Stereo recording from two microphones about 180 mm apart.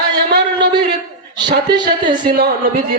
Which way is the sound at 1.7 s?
25° right (ahead or behind).